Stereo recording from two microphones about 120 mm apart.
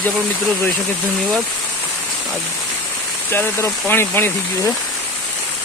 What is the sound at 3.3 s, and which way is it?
Speech, 20° left (ahead or behind).